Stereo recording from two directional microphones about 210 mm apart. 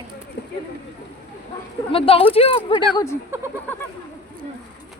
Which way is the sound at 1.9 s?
25° left (ahead or behind).